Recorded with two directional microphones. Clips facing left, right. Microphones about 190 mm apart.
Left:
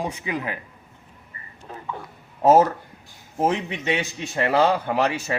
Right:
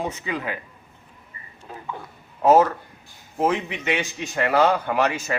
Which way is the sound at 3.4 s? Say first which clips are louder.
Even; 30° left (ahead or behind).